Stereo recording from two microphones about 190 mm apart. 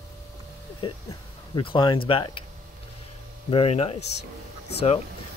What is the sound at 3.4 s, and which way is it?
Speech, 30° left (ahead or behind).